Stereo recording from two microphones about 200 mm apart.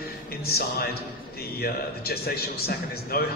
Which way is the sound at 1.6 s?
50° left (ahead or behind).